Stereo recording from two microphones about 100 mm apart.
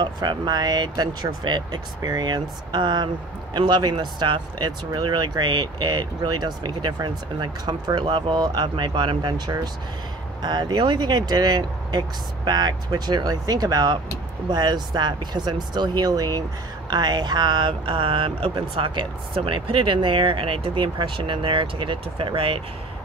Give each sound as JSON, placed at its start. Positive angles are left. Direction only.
{"t": 0.0, "sound": "speech", "side_deg": -50}
{"t": 10.4, "sound": "speech", "side_deg": -45}